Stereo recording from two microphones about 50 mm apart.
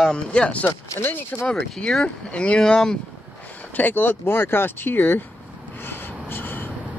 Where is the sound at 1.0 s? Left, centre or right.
Left.